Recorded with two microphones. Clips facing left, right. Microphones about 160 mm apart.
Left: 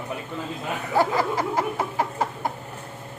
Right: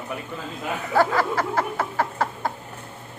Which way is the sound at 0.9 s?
15° left (ahead or behind).